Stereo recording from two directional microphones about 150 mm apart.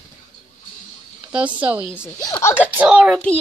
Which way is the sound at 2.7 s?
10° right (ahead or behind).